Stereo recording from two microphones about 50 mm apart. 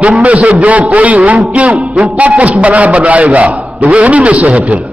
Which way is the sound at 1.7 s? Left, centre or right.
Centre.